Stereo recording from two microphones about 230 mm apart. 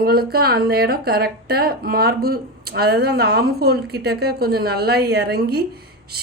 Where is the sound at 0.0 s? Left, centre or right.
Right.